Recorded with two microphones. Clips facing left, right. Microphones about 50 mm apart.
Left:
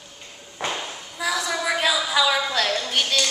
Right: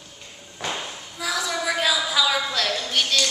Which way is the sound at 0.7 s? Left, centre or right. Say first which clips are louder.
Left 1 dB; centre.